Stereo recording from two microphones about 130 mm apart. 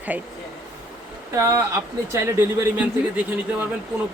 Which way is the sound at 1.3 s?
25° right (ahead or behind).